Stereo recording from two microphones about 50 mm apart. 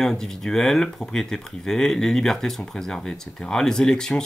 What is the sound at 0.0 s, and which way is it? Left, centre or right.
Speech, centre.